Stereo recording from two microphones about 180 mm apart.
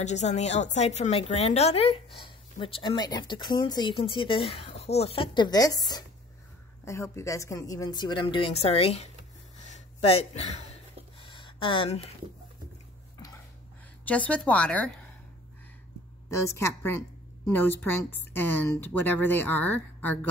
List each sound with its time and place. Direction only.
0.0 s a woman's voice: 40° left (ahead or behind)
9.6 s a sound: 40° left (ahead or behind)
14.0 s speech: 10° left (ahead or behind)
16.3 s speech: 15° left (ahead or behind)
18.9 s speech: 10° left (ahead or behind)